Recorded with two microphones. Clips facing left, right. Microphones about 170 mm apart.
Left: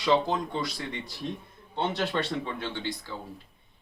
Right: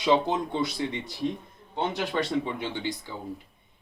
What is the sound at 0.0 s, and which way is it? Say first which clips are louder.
A man's voice: right 1 dB; 20° right (ahead or behind).